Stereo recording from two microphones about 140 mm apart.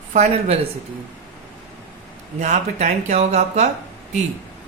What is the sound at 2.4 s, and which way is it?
Speech, 55° right (ahead or behind).